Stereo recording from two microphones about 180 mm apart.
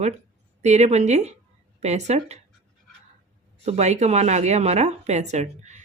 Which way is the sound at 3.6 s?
40° right (ahead or behind).